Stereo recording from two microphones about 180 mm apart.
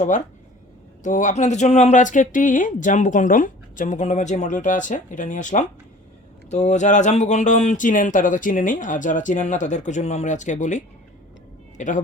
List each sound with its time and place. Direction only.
1.0 s speech: 45° left (ahead or behind)